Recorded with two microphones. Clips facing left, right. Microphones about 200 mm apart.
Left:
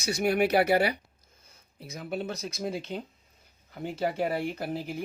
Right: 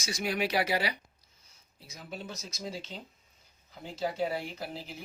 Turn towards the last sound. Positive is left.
turn(degrees=50)  # may be behind; listen again after turning